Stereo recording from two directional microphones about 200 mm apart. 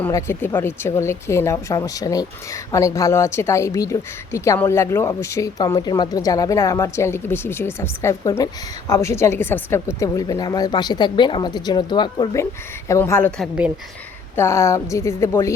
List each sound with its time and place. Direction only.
0.0 s a woman's voice: 15° left (ahead or behind)
14.3 s a woman's voice: 15° left (ahead or behind)